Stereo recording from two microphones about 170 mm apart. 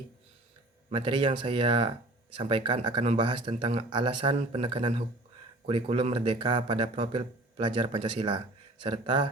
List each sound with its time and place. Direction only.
0.9 s a man's voice: 30° right (ahead or behind)